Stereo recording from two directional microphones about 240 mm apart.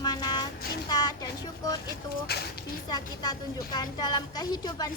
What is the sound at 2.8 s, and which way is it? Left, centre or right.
A woman's voice, centre.